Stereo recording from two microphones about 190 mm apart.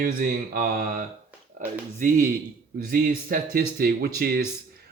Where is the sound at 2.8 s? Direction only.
50° right (ahead or behind).